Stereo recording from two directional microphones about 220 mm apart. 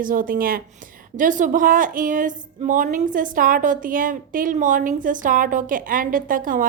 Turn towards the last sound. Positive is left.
turn(degrees=-40)  # may be behind; listen again after turning